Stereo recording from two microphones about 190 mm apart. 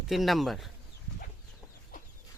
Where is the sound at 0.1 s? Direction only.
Centre (ahead or behind).